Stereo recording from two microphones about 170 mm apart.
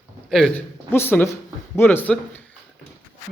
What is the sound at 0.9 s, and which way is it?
Speech, 10° left (ahead or behind).